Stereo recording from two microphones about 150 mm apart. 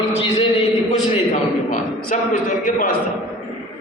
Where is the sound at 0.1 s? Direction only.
45° left (ahead or behind).